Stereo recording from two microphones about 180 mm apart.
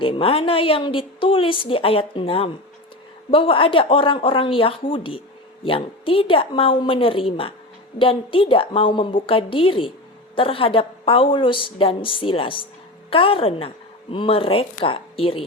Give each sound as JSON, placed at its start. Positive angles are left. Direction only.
{"t": 0.0, "sound": "a woman's voice", "side_deg": 30}